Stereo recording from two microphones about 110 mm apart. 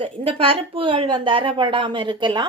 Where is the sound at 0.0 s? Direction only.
55° right (ahead or behind).